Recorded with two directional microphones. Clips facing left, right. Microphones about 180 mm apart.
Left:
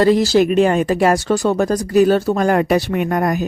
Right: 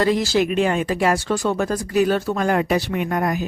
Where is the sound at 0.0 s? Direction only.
35° left (ahead or behind).